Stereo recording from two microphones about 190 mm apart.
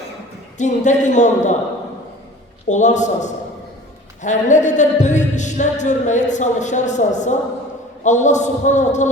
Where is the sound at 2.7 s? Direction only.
40° left (ahead or behind).